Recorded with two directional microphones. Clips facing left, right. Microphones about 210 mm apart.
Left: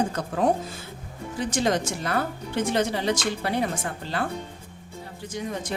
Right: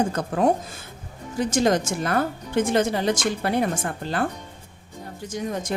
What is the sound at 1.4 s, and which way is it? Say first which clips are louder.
A woman's voice: right 4 dB; 45° right (ahead or behind).